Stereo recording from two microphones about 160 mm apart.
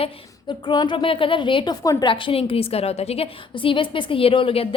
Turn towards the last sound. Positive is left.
turn(degrees=35)  # may be behind; listen again after turning